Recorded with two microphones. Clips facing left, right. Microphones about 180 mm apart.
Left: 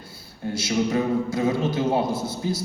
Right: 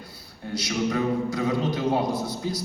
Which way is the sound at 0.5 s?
25° left (ahead or behind).